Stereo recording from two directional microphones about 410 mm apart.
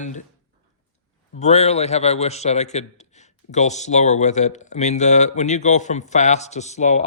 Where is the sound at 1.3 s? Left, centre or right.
Centre.